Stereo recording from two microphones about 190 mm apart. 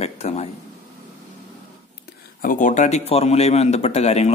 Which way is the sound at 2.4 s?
45° left (ahead or behind).